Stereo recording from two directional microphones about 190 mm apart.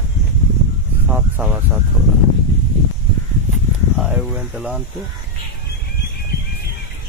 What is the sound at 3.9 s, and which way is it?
Speech, 5° right (ahead or behind).